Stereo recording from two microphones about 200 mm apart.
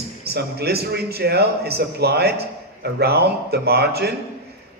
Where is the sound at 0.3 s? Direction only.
55° right (ahead or behind).